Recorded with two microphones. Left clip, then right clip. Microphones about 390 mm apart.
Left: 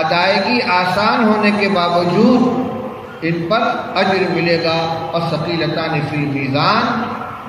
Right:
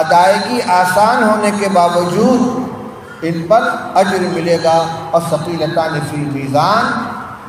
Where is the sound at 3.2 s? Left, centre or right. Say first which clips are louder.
Right 4 dB; centre.